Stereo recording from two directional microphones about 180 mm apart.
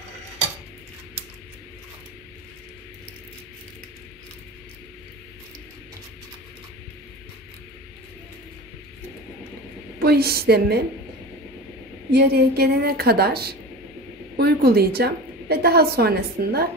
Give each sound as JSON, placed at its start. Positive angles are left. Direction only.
{"t": 10.0, "sound": "a woman's voice", "side_deg": -60}
{"t": 12.1, "sound": "a woman's voice", "side_deg": -65}